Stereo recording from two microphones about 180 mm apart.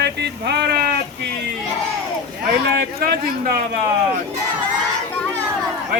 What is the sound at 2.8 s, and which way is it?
Speech, 55° right (ahead or behind).